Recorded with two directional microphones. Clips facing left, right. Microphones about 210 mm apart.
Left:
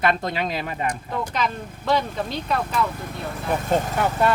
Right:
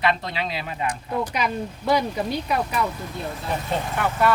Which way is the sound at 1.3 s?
10° right (ahead or behind).